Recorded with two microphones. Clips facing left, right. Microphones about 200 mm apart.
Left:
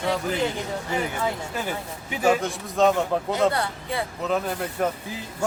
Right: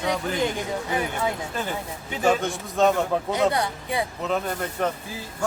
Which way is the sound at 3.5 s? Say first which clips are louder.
Right 1 dB; 15° right (ahead or behind).